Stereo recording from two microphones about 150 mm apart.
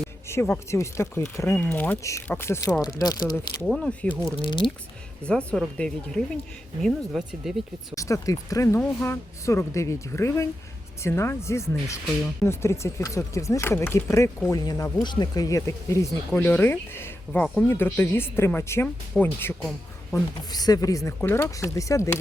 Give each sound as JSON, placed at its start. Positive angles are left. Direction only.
{"t": 0.3, "sound": "speech", "side_deg": 15}
{"t": 3.7, "sound": "speech", "side_deg": 5}
{"t": 4.4, "sound": "speech", "side_deg": 35}
{"t": 5.2, "sound": "speech", "side_deg": 10}
{"t": 7.9, "sound": "speech", "side_deg": 20}
{"t": 20.5, "sound": "speech", "side_deg": 25}